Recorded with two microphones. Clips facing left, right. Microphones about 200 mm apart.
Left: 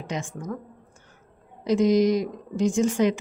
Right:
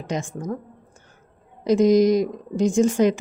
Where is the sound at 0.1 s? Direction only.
40° right (ahead or behind).